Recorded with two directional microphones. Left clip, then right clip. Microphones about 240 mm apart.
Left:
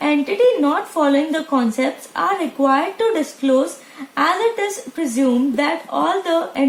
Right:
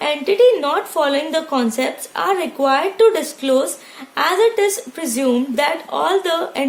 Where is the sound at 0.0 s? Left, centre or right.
Right.